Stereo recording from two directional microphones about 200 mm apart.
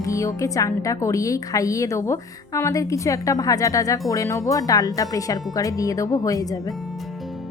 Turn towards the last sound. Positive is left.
turn(degrees=15)  # may be behind; listen again after turning